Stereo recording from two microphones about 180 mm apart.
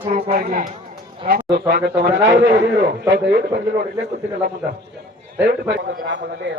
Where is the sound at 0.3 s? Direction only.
55° right (ahead or behind).